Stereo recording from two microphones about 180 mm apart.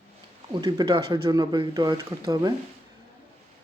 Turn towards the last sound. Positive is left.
turn(degrees=-20)  # may be behind; listen again after turning